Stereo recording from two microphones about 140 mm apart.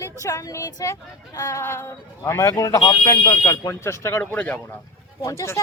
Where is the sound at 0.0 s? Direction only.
20° left (ahead or behind).